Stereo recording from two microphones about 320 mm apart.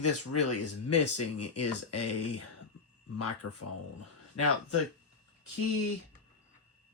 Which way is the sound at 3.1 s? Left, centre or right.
Left.